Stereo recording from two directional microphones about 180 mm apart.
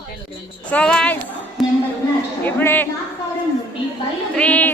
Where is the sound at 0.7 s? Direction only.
5° left (ahead or behind).